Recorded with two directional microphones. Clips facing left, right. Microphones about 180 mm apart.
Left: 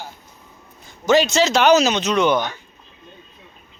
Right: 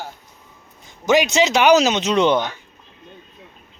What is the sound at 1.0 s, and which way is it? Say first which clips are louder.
Speech: even; 15° right (ahead or behind).